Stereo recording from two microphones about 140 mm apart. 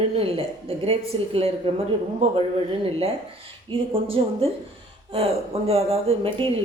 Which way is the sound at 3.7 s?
40° right (ahead or behind).